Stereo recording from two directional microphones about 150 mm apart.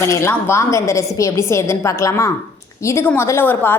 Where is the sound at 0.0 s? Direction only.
15° left (ahead or behind).